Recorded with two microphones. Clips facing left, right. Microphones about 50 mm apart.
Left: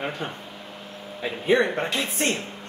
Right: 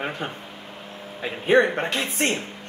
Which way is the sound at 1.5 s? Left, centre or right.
Right.